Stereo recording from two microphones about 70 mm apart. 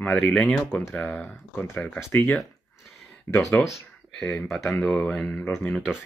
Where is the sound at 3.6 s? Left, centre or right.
Left.